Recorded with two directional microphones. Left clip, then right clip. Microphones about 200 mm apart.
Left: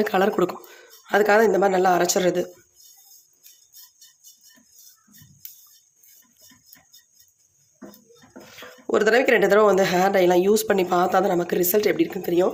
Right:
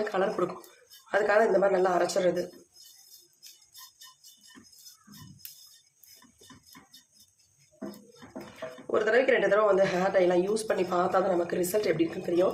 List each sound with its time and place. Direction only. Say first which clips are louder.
0.0 s speech: left 8 dB; 55° left (ahead or behind)
8.9 s speech: left 6 dB; 55° left (ahead or behind)